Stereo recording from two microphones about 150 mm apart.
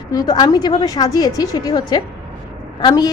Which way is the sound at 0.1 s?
25° left (ahead or behind).